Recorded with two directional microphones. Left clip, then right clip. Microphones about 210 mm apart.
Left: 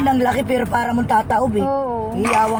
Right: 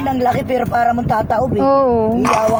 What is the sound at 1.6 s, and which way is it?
Speech, 55° right (ahead or behind).